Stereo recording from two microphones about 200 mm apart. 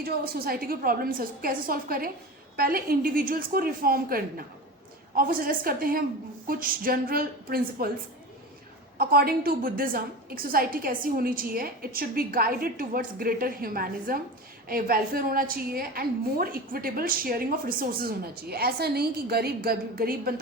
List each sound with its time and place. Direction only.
0.0 s a woman's voice: 50° right (ahead or behind)
9.0 s a woman's voice: 50° right (ahead or behind)